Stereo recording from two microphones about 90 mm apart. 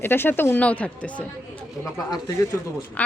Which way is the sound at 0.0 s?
25° left (ahead or behind).